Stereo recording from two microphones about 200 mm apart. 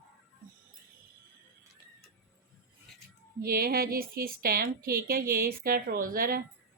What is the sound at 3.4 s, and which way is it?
Speech, 50° right (ahead or behind).